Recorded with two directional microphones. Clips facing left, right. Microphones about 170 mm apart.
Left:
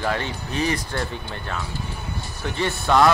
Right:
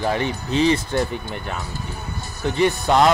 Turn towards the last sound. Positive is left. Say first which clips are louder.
# right 2 dB
turn(degrees=-20)  # may be behind; listen again after turning